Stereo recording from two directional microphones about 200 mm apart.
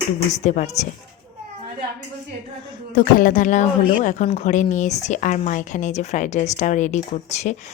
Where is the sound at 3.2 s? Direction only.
40° left (ahead or behind).